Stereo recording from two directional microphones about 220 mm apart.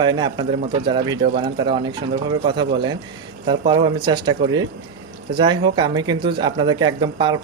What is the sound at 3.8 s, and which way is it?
Speech, 20° right (ahead or behind).